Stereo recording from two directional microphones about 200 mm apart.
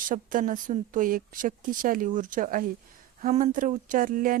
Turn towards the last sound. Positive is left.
turn(degrees=-45)  # may be behind; listen again after turning